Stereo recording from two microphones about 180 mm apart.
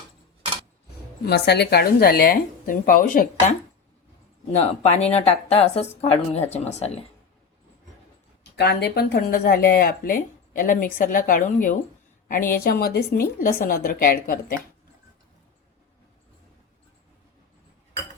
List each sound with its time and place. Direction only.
1.2 s a woman's voice: 65° left (ahead or behind); by 3.2 s 50° left (ahead or behind)
4.6 s speech: 35° left (ahead or behind)
8.5 s a woman's voice: 65° left (ahead or behind)